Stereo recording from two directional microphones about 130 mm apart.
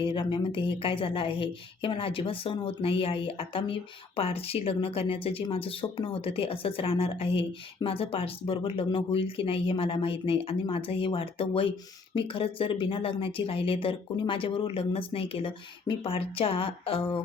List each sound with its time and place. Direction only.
0.1 s speech: 40° left (ahead or behind)